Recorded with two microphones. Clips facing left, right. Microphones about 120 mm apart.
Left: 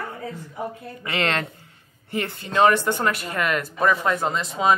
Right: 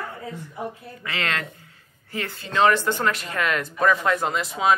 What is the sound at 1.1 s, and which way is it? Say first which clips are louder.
Speech: left 4 dB; 30° left (ahead or behind).